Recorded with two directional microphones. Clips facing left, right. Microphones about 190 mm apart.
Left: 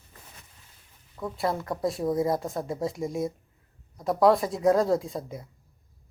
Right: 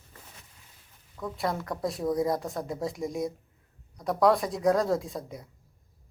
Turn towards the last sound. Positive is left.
turn(degrees=0)  # may be behind; listen again after turning